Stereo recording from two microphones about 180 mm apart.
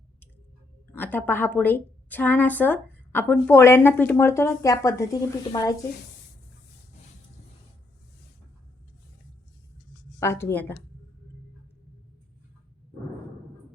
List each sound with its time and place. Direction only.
0.9 s a woman's voice: 10° left (ahead or behind)
10.2 s a woman's voice: 15° left (ahead or behind)